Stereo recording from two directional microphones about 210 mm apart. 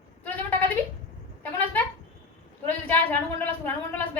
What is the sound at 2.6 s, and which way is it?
Speech, 10° left (ahead or behind).